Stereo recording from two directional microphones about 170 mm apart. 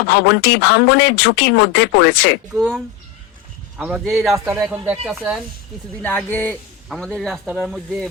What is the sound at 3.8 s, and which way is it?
A man's voice, 10° right (ahead or behind).